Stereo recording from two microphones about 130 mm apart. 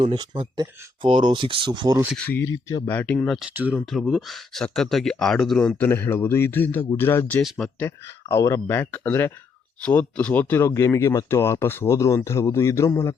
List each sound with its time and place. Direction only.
0.0 s speech: 40° right (ahead or behind)
2.1 s speech: 15° left (ahead or behind)
3.5 s speech: 15° right (ahead or behind)
3.8 s speech: centre (ahead or behind)
5.7 s speech: 15° left (ahead or behind)